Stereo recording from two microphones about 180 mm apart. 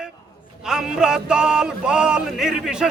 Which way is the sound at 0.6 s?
5° right (ahead or behind).